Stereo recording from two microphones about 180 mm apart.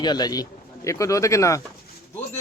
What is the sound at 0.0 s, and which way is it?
Speech, 25° left (ahead or behind).